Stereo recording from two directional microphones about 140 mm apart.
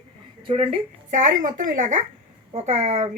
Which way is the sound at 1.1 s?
65° right (ahead or behind).